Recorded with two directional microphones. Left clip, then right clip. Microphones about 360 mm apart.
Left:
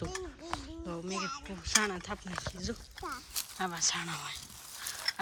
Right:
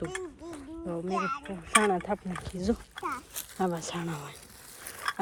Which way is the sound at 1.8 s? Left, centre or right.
Centre.